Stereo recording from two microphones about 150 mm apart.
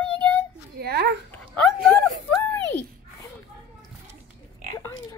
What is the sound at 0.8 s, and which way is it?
Speech, 90° right.